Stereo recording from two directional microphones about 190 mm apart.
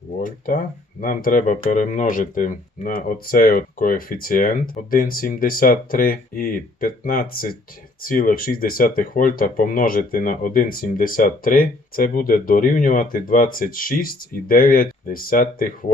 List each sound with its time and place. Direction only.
0.2 s speech: 45° left (ahead or behind)